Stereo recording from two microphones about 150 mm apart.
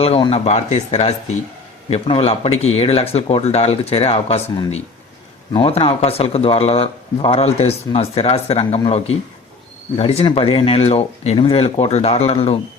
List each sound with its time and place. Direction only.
0.0 s speech: 40° left (ahead or behind)